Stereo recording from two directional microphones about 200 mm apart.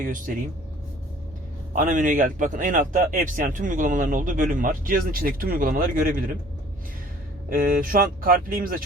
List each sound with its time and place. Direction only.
0.0 s speech: 45° right (ahead or behind)
1.8 s speech: 40° right (ahead or behind)
7.5 s speech: 45° right (ahead or behind)